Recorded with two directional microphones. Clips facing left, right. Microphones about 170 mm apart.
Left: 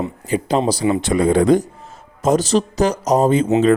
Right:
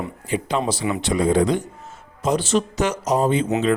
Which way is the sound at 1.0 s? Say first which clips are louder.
Left 1 dB; 55° left (ahead or behind).